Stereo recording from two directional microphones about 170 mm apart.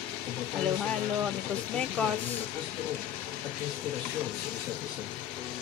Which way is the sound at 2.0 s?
5° left (ahead or behind).